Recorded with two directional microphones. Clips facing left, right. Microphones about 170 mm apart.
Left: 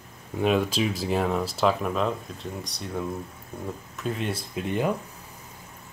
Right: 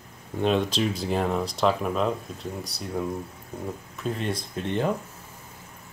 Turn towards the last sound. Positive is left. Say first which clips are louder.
# even
turn(degrees=10)  # may be behind; listen again after turning